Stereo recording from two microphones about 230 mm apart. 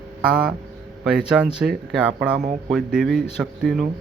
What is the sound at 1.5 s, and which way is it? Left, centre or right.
Speech, centre.